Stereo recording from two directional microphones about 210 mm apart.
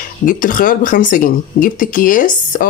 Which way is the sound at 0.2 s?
40° left (ahead or behind).